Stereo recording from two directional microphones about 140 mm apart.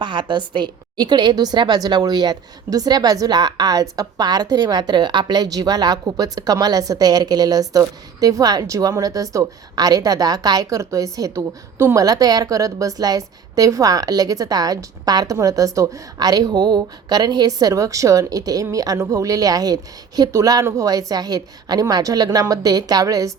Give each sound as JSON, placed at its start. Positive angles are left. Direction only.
{"t": 0.0, "sound": "a woman's voice", "side_deg": -35}